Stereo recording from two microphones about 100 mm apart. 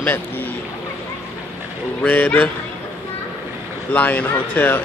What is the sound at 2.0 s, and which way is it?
Speech, 15° left (ahead or behind).